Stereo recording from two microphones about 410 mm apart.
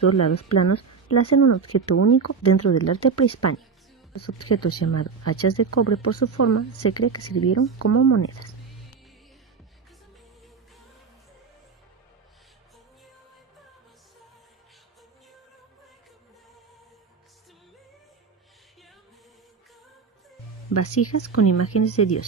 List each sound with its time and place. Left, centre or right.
0.5 s speech: left
20.7 s speech: left